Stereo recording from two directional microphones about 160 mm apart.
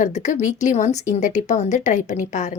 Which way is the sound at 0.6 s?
50° left (ahead or behind).